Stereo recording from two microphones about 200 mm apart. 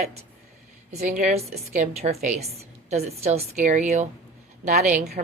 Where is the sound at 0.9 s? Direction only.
35° right (ahead or behind).